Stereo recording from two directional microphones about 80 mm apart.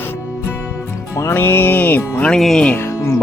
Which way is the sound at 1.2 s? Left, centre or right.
Left.